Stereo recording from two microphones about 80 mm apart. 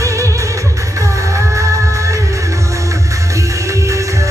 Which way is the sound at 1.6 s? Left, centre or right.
Right.